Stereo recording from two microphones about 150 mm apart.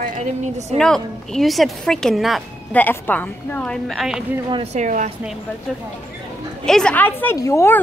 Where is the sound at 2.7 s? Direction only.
10° left (ahead or behind).